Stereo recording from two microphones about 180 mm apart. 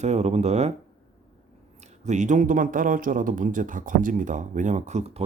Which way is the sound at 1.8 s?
40° right (ahead or behind).